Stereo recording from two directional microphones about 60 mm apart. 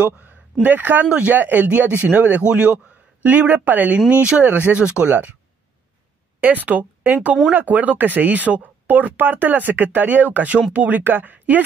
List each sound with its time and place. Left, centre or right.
0.0 s speech: right
1.3 s speech: right
4.5 s speech: right
6.4 s speech: right